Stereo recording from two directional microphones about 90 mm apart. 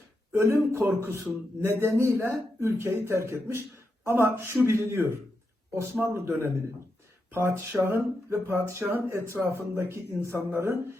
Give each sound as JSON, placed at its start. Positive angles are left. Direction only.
{"t": 0.3, "sound": "speech", "side_deg": -30}